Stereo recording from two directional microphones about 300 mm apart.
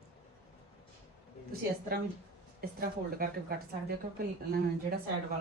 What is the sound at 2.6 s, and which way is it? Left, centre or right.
Speech, right.